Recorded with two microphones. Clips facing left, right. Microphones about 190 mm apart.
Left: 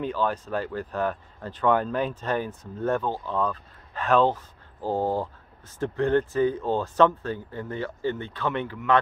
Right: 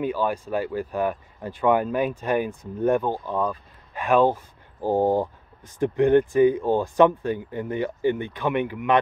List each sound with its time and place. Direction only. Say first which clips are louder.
0.0 s speech: right 2 dB; 10° right (ahead or behind)